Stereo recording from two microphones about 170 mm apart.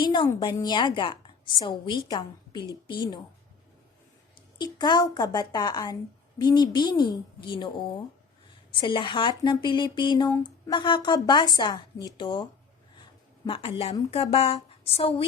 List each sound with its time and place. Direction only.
0.0 s a woman's voice: 30° left (ahead or behind)
4.5 s a woman's voice: 25° left (ahead or behind)
8.7 s a woman's voice: 30° left (ahead or behind)